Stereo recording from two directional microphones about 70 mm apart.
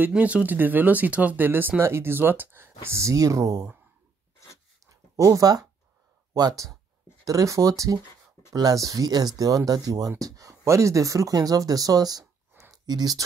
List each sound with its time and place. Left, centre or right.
0.1 s speech: centre; by 3.6 s right
5.1 s speech: right
8.5 s speech: right
9.4 s speech: right